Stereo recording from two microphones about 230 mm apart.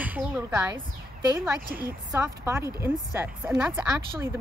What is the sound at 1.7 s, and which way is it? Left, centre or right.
Speech, right.